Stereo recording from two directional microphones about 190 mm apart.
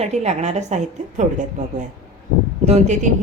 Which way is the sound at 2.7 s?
40° right (ahead or behind).